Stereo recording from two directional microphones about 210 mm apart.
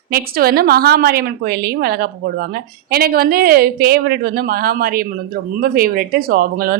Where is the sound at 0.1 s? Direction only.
45° right (ahead or behind).